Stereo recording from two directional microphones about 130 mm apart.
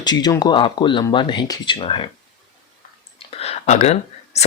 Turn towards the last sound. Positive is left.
turn(degrees=55)  # may be behind; listen again after turning